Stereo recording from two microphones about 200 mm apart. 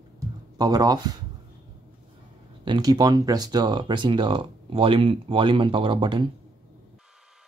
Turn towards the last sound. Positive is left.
turn(degrees=-25)  # may be behind; listen again after turning